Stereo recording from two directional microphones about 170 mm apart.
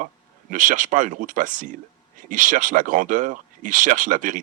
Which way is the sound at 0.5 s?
50° right (ahead or behind).